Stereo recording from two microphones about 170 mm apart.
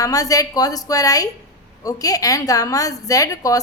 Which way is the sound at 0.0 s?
20° left (ahead or behind).